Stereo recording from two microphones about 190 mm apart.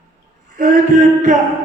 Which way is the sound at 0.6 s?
40° right (ahead or behind).